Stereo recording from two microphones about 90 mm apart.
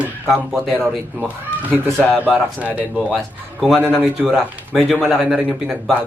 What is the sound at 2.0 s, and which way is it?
Speech, 20° left (ahead or behind).